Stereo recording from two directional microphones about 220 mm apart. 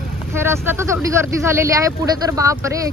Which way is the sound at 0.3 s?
10° right (ahead or behind).